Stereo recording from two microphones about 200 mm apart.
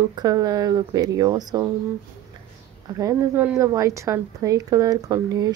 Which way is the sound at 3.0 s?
15° right (ahead or behind).